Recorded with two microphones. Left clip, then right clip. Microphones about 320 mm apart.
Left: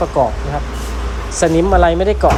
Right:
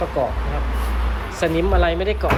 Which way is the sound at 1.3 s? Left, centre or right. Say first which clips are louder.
Left 8 dB; centre.